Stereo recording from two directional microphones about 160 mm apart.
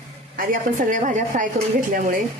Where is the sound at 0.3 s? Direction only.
55° right (ahead or behind).